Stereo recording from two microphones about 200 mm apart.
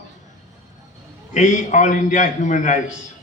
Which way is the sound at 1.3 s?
40° left (ahead or behind).